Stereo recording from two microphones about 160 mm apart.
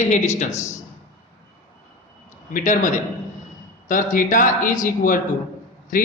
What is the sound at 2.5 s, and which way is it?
A man's voice, 55° left (ahead or behind).